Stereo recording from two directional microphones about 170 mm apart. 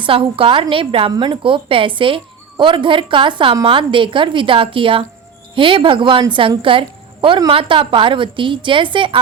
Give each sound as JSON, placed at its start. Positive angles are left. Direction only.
{"t": 0.0, "sound": "a woman's voice", "side_deg": -30}